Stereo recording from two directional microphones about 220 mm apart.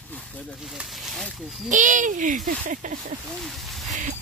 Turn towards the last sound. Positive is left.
turn(degrees=0)  # may be behind; listen again after turning